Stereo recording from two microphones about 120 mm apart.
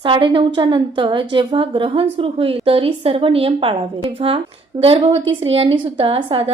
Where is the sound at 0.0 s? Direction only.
45° right (ahead or behind).